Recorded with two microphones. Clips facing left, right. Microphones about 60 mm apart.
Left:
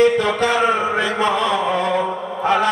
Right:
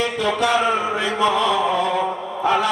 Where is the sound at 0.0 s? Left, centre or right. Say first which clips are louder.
Left 5 dB; left.